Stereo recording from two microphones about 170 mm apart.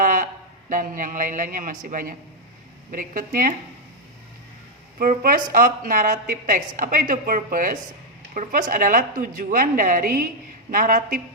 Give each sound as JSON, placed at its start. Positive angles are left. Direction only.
{"t": 0.0, "sound": "a sound", "side_deg": -50}
{"t": 0.7, "sound": "a woman's voice", "side_deg": -50}
{"t": 4.9, "sound": "a woman's voice", "side_deg": -60}